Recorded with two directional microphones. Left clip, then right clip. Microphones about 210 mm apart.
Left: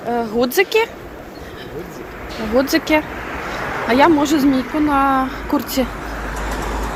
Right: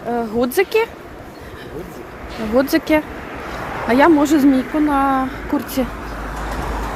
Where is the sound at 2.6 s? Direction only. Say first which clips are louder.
Even; 25° right (ahead or behind).